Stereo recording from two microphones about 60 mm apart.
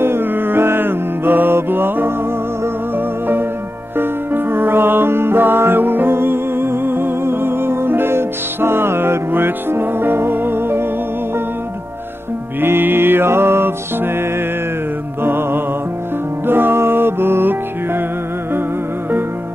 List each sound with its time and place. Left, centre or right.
0.0 s music: right
3.9 s music: right
12.5 s music: right
15.2 s music: right